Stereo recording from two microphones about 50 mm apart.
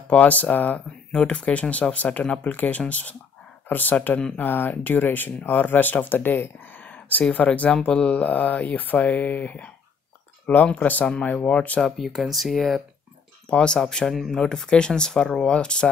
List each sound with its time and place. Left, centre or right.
0.1 s speech: left
6.8 s a sound: left
7.7 s speech: centre
12.0 s speech: centre
13.5 s speech: centre